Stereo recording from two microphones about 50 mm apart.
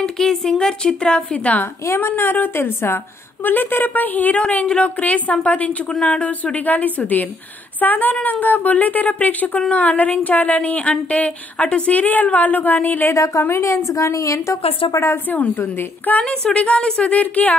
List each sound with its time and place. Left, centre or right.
0.0 s speech: centre; by 1.6 s left
2.0 s a woman's voice: left
3.4 s a woman's voice: left
13.1 s a woman's voice: left
15.2 s a woman's voice: left
16.5 s speech: left
16.8 s speech: centre
17.1 s a woman's voice: left